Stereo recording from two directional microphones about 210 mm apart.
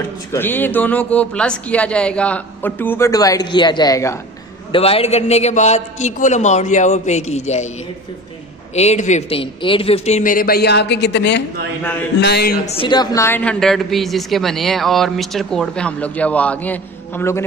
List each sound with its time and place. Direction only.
0.3 s speech: 10° left (ahead or behind)
4.7 s a man's voice: 25° left (ahead or behind)
8.7 s a man's voice: 30° left (ahead or behind); by 12.5 s 50° left (ahead or behind)
12.6 s a woman's voice: 25° left (ahead or behind)